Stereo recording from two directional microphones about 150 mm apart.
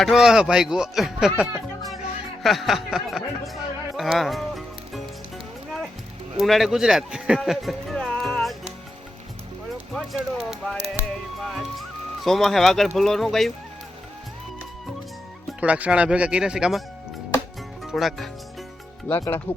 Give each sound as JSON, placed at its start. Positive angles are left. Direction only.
{"t": 0.0, "sound": "speech", "side_deg": -5}
{"t": 6.3, "sound": "speech", "side_deg": 0}
{"t": 9.7, "sound": "speech", "side_deg": 0}
{"t": 11.3, "sound": "music", "side_deg": 0}
{"t": 13.0, "sound": "speech", "side_deg": 0}
{"t": 15.6, "sound": "speech", "side_deg": -10}
{"t": 17.8, "sound": "speech", "side_deg": 0}
{"t": 19.2, "sound": "speech", "side_deg": 15}